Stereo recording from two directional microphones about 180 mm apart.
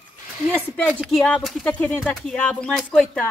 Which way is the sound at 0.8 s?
Centre (ahead or behind).